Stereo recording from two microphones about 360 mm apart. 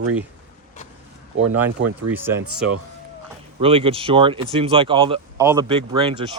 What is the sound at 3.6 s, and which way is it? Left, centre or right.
Speech, centre.